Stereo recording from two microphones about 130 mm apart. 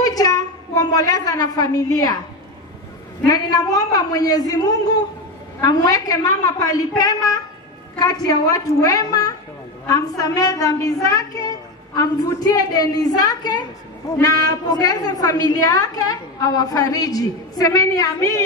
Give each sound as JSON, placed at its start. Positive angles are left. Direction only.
{"t": 0.0, "sound": "a sound", "side_deg": 30}
{"t": 0.9, "sound": "a woman's voice", "side_deg": 30}
{"t": 3.3, "sound": "a woman's voice", "side_deg": 30}